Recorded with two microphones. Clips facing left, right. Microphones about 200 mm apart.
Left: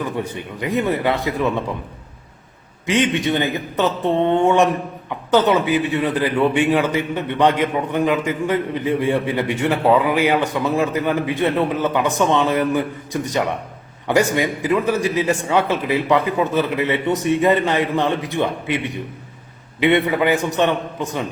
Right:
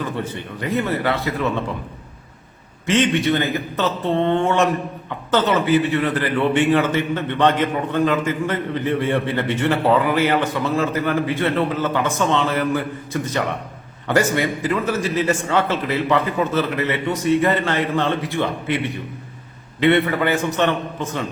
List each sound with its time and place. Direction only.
0.0 s a man's voice: 15° left (ahead or behind)
2.8 s a man's voice: 15° left (ahead or behind)
14.1 s a man's voice: 15° left (ahead or behind)